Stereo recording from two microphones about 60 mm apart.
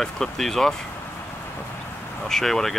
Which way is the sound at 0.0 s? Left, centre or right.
Centre.